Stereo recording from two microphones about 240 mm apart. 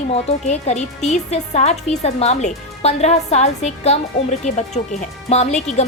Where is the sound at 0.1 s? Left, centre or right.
Left.